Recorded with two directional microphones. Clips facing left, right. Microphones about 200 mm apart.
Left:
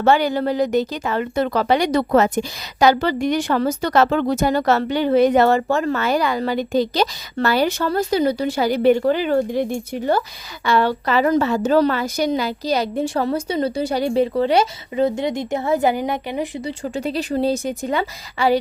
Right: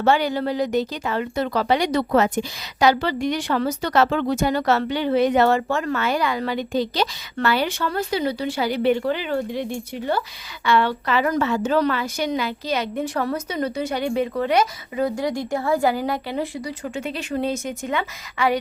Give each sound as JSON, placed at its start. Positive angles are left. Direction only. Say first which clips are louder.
{"t": 0.0, "sound": "a woman's voice", "louder": "left 3 dB", "side_deg": 45}
{"t": 16.8, "sound": "a woman's voice", "louder": "left 8 dB", "side_deg": 35}